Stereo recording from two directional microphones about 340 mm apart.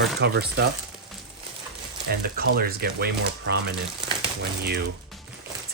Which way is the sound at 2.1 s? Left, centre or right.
Right.